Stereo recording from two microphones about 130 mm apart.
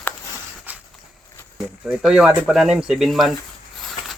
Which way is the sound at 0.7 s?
15° right (ahead or behind).